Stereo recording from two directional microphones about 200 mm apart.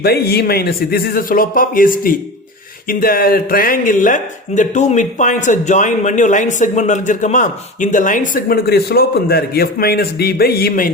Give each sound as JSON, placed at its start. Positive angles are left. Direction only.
{"t": 0.0, "sound": "speech", "side_deg": 50}